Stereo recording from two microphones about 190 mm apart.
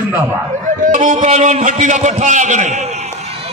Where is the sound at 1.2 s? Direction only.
40° right (ahead or behind).